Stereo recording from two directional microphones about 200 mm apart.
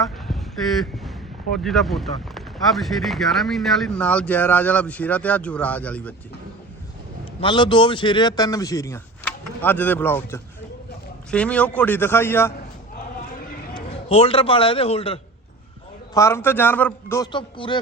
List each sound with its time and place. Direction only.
1.6 s speech: centre (ahead or behind)
7.4 s a man's voice: 25° left (ahead or behind)
13.7 s a man's voice: 30° left (ahead or behind)
16.1 s a man's voice: 15° left (ahead or behind)
17.3 s speech: 25° left (ahead or behind)